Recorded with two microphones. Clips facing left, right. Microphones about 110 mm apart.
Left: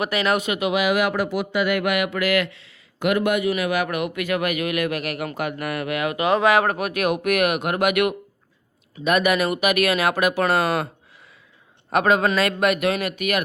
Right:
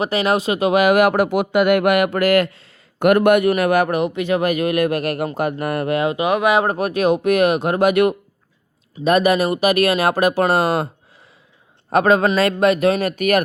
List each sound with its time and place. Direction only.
0.0 s speech: 30° right (ahead or behind); by 3.8 s 50° right (ahead or behind)
3.8 s speech: 30° right (ahead or behind)
6.7 s speech: 30° right (ahead or behind)
11.9 s speech: 35° right (ahead or behind)